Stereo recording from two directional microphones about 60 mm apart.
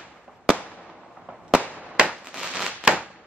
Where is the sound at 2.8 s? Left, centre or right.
Right.